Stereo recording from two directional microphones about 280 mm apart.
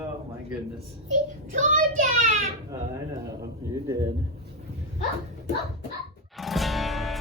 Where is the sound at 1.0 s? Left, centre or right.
Right.